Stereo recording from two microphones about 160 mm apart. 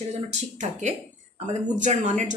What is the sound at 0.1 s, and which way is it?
A woman's voice, 45° right (ahead or behind).